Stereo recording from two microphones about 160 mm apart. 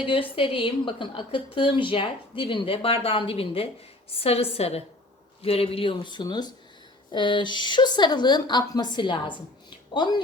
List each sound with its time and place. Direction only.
0.0 s a woman's voice: 35° left (ahead or behind)